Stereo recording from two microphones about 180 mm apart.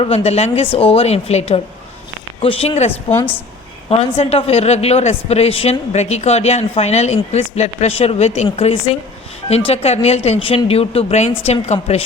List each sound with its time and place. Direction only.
0.0 s a woman's voice: 35° left (ahead or behind)
3.1 s a woman's voice: 10° left (ahead or behind)
3.8 s a woman's voice: 30° left (ahead or behind)